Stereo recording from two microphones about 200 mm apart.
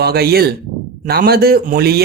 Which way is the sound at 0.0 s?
50° right (ahead or behind).